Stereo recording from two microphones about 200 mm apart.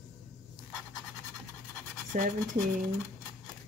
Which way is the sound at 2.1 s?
40° right (ahead or behind).